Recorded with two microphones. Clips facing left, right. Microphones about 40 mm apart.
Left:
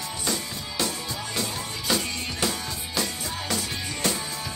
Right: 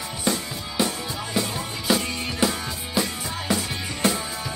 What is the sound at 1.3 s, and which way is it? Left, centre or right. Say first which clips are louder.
Music: right 5 dB; centre.